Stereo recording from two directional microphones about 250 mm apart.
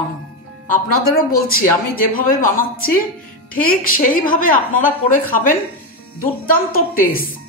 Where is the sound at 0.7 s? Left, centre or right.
Left.